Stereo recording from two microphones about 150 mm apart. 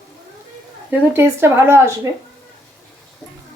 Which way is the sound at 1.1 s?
15° right (ahead or behind).